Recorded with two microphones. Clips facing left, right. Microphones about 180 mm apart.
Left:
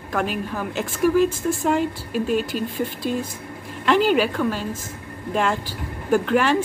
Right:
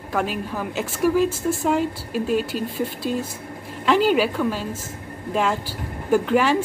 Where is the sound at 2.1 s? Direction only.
50° left (ahead or behind).